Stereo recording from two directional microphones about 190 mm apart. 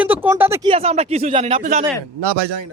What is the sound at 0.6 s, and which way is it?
Speech, 30° right (ahead or behind).